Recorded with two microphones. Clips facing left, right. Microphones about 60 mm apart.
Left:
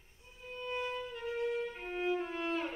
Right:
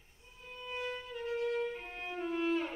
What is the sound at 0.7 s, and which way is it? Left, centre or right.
Violin, centre.